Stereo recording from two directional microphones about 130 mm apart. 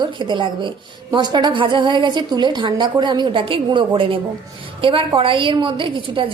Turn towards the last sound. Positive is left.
turn(degrees=-40)  # may be behind; listen again after turning